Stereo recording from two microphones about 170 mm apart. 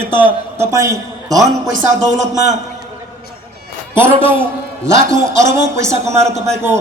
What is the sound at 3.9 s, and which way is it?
A man's voice, 15° right (ahead or behind).